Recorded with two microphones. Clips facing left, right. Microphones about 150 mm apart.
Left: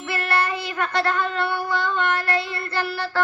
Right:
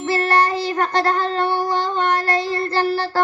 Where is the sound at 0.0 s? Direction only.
35° right (ahead or behind).